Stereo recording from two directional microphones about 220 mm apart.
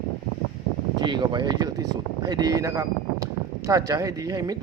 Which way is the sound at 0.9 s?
20° right (ahead or behind).